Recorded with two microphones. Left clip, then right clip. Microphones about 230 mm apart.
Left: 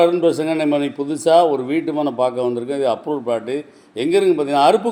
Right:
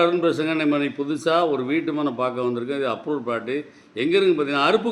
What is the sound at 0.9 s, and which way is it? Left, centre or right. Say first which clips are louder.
Speech: left 7 dB; left.